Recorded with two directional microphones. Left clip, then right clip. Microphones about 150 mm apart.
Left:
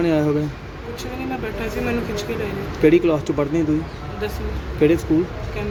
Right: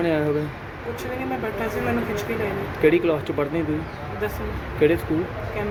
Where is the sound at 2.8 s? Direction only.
30° left (ahead or behind).